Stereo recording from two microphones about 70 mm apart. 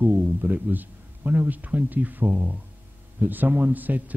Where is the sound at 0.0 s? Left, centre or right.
Right.